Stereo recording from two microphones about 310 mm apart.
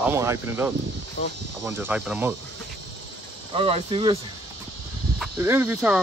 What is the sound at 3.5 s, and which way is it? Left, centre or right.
Speech, centre.